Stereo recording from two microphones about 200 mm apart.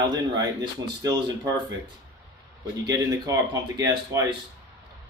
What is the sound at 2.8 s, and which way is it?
Speech, 20° right (ahead or behind).